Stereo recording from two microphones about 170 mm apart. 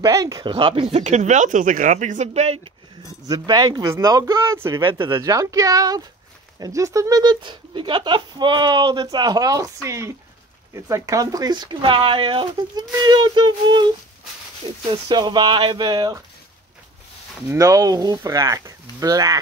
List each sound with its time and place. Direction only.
0.0 s speech: 20° right (ahead or behind)
0.5 s speech: 30° right (ahead or behind)
1.0 s speech: 45° right (ahead or behind)
3.3 s speech: 25° right (ahead or behind)
4.9 s speech: 25° right (ahead or behind)
17.5 s speech: 20° right (ahead or behind)